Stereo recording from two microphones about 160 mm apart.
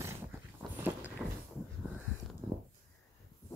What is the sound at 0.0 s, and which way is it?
Dog, 15° right (ahead or behind).